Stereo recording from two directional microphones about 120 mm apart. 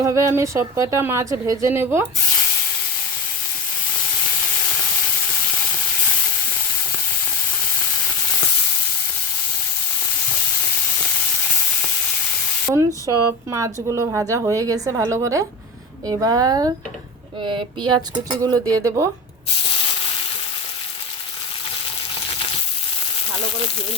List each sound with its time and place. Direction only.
0.0 s speech: 25° right (ahead or behind)
12.7 s speech: 25° right (ahead or behind)
17.4 s speech: 40° right (ahead or behind); by 19.0 s 25° right (ahead or behind)